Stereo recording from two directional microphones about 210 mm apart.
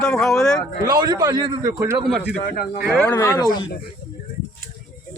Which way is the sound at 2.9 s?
10° left (ahead or behind).